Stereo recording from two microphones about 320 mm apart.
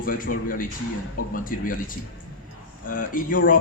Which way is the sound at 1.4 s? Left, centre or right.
Left.